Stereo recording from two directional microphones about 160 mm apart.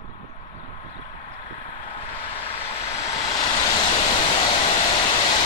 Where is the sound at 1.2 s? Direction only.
30° left (ahead or behind).